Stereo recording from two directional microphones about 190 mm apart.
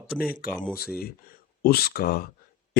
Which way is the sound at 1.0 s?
50° left (ahead or behind).